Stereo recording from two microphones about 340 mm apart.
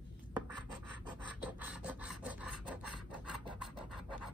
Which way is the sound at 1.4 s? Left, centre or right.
Centre.